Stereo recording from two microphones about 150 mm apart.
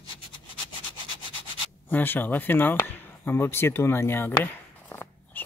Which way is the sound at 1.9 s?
15° left (ahead or behind).